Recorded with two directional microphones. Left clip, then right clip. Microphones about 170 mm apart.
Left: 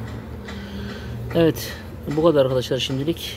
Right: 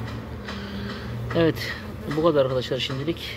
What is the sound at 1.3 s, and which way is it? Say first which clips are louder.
Speech: left 3 dB; 30° left (ahead or behind).